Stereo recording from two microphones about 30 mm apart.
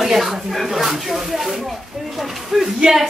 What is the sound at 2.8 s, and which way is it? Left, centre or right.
Speech, right.